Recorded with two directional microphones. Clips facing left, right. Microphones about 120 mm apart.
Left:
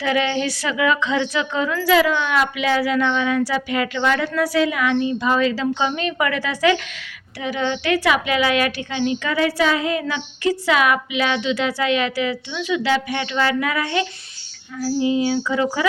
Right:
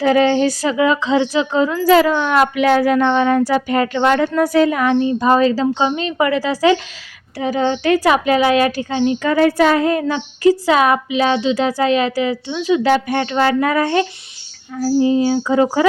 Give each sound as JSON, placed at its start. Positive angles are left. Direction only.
{"t": 0.0, "sound": "a woman's voice", "side_deg": -40}